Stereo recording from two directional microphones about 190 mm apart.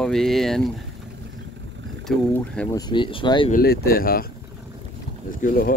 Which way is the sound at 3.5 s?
55° left (ahead or behind).